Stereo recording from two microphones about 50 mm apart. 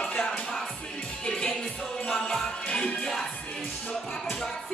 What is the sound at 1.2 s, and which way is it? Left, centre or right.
Music, centre.